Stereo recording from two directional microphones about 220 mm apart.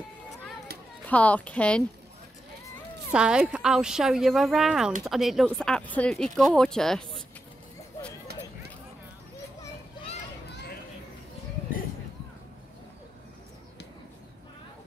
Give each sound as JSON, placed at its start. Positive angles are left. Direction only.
{"t": 1.0, "sound": "speech", "side_deg": 5}
{"t": 3.1, "sound": "speech", "side_deg": -5}